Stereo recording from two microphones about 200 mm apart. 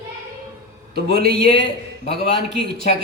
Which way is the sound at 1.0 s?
50° right (ahead or behind).